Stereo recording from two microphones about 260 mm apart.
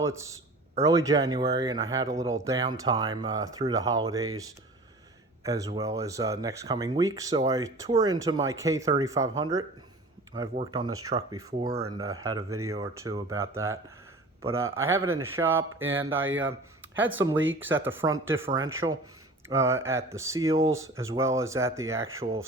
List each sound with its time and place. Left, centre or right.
0.0 s a man's voice: centre
5.4 s speech: centre
15.0 s speech: right
16.4 s speech: centre